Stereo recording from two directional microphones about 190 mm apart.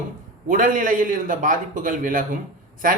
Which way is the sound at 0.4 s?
45° right (ahead or behind).